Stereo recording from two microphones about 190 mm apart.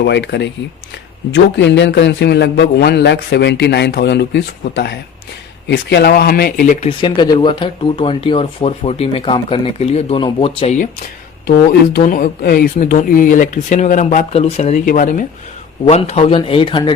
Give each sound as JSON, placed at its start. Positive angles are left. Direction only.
{"t": 0.0, "sound": "a man's voice", "side_deg": 65}
{"t": 7.2, "sound": "speech", "side_deg": 25}
{"t": 11.9, "sound": "speech", "side_deg": 45}
{"t": 15.8, "sound": "speech", "side_deg": 35}